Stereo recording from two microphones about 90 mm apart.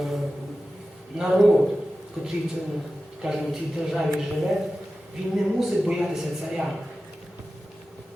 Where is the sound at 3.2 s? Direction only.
5° right (ahead or behind).